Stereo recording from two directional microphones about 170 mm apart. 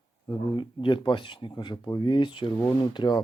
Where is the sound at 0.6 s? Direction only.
30° left (ahead or behind).